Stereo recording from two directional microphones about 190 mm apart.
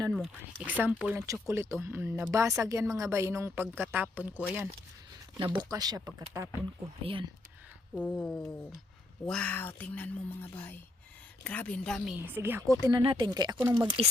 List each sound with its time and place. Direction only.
0.1 s speech: 5° right (ahead or behind)
5.7 s speech: 20° right (ahead or behind)
7.0 s speech: 25° right (ahead or behind)
7.9 s speech: 10° left (ahead or behind)
12.2 s speech: 10° right (ahead or behind)
12.8 s speech: 25° right (ahead or behind)